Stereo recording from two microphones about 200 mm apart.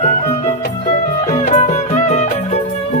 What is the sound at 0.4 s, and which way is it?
Music, 35° left (ahead or behind).